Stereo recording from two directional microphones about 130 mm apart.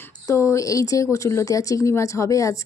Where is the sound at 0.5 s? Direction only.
25° left (ahead or behind).